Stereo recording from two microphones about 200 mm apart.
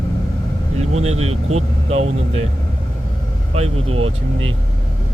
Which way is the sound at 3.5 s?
30° right (ahead or behind).